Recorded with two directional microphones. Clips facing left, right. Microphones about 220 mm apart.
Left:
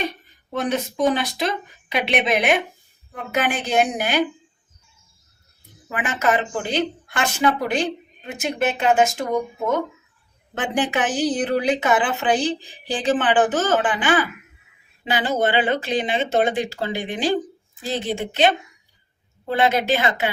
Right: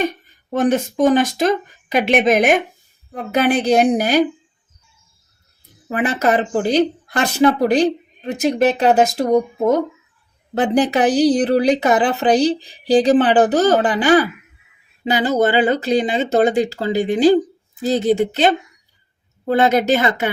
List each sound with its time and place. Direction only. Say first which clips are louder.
0.5 s speech: right 7 dB; 45° right (ahead or behind)
5.9 s speech: right 5 dB; 35° right (ahead or behind)